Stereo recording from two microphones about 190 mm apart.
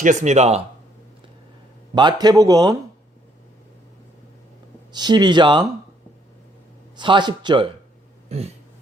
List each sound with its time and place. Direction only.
0.0 s speech: 40° right (ahead or behind)
2.0 s speech: 20° right (ahead or behind)
4.9 s speech: 20° right (ahead or behind)
6.9 s speech: 25° right (ahead or behind)
8.3 s a sound: 35° right (ahead or behind)